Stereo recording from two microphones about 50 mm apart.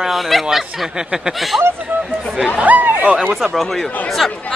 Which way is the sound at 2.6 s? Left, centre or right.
Right.